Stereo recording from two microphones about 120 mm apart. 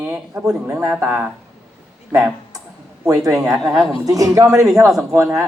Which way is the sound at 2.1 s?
30° right (ahead or behind).